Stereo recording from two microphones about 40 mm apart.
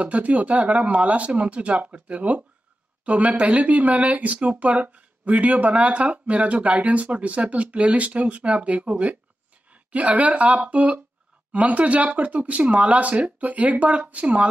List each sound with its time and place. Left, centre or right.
0.0 s speech: right